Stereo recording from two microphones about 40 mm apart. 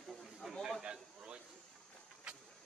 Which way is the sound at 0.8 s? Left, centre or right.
Right.